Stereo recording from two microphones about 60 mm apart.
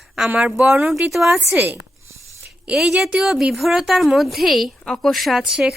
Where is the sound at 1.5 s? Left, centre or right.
Right.